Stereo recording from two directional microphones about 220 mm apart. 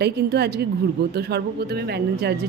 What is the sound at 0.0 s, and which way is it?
A woman's voice, 45° right (ahead or behind).